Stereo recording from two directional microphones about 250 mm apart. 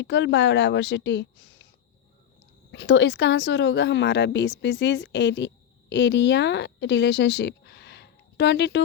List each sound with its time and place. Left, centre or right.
0.0 s a woman's voice: left
2.7 s speech: left